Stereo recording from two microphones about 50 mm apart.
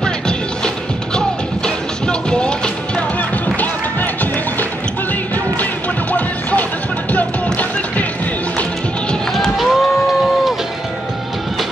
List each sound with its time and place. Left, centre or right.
2.0 s music: centre
3.2 s music: left
9.3 s run: centre